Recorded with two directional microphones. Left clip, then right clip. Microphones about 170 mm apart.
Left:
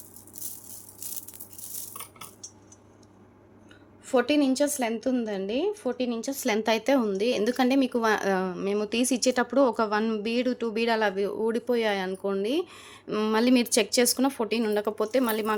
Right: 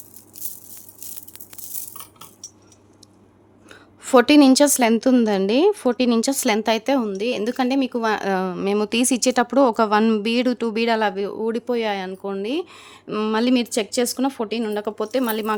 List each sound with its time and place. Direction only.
3.7 s a woman's voice: 60° right (ahead or behind); by 6.6 s 40° right (ahead or behind)
6.6 s speech: 25° right (ahead or behind)